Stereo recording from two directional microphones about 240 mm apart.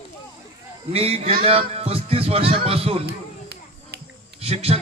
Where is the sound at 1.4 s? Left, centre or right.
Right.